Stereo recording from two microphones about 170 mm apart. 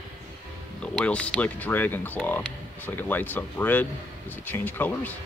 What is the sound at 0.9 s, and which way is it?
Speech, 5° left (ahead or behind).